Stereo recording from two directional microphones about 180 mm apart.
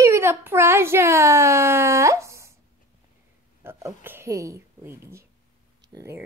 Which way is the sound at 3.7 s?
10° right (ahead or behind).